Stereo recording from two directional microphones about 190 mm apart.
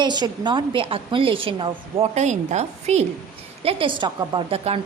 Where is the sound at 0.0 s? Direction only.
25° right (ahead or behind).